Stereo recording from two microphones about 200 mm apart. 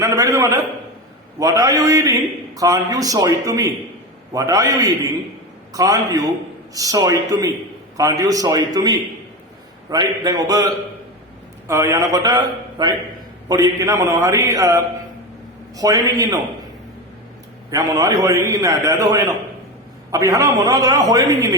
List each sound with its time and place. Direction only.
0.0 s a man's voice: 15° right (ahead or behind)
11.7 s a man's voice: 15° right (ahead or behind)
17.7 s a man's voice: 15° right (ahead or behind)